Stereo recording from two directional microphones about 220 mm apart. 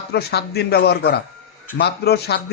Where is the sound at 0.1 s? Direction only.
45° left (ahead or behind).